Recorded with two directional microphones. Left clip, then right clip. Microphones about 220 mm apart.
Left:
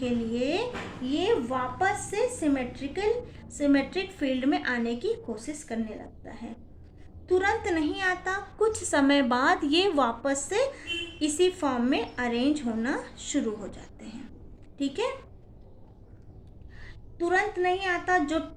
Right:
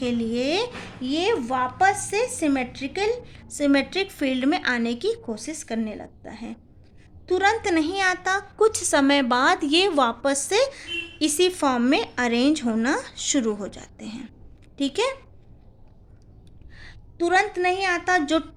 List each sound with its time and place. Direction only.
0.0 s a woman's voice: 50° right (ahead or behind)
16.7 s a woman's voice: 50° right (ahead or behind)